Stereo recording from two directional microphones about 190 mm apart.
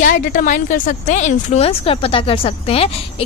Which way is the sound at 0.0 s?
45° left (ahead or behind).